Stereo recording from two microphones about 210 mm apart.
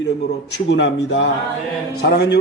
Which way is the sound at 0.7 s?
60° left (ahead or behind).